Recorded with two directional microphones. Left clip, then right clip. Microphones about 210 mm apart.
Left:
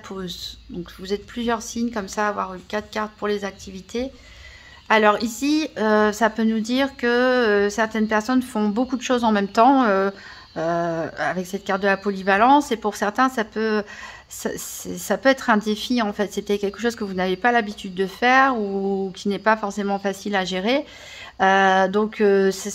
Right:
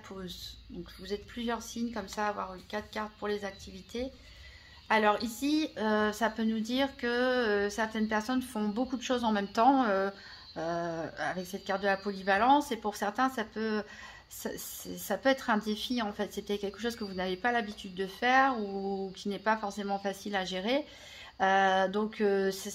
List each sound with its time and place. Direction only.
0.1 s a woman's voice: 35° left (ahead or behind)